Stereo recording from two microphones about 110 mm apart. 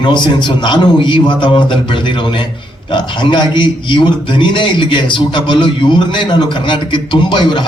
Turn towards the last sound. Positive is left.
turn(degrees=45)  # may be behind; listen again after turning